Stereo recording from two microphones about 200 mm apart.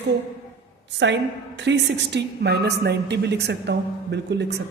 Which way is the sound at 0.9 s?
60° right (ahead or behind).